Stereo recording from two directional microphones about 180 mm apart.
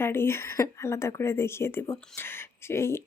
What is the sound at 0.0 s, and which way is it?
Speech, 15° left (ahead or behind).